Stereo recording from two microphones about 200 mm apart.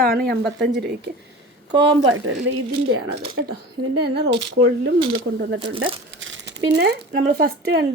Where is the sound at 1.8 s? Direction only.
70° right (ahead or behind).